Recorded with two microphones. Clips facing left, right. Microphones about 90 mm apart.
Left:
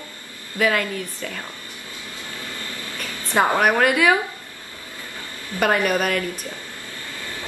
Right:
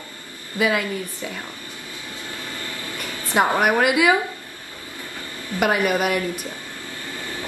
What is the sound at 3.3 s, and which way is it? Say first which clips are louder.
Speech: even; 15° right (ahead or behind).